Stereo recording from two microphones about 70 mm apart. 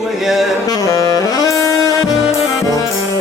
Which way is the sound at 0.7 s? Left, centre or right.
Left.